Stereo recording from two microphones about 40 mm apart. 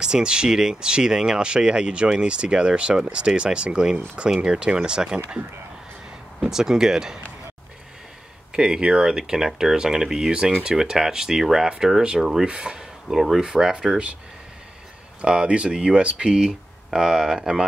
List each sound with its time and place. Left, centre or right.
0.0 s speech: right
6.5 s speech: centre
8.5 s speech: right
12.4 s speech: right
12.7 s a sound: centre
13.4 s speech: centre
15.2 s speech: right